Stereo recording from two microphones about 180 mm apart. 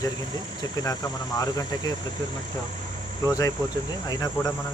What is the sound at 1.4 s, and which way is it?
Speech, 20° left (ahead or behind).